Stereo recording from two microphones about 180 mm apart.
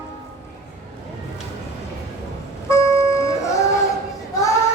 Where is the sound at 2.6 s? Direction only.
15° left (ahead or behind).